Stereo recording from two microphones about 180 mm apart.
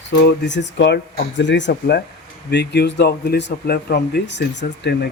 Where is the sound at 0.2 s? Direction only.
75° left (ahead or behind).